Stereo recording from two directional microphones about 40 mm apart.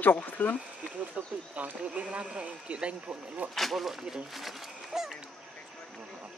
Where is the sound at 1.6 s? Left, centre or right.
Right.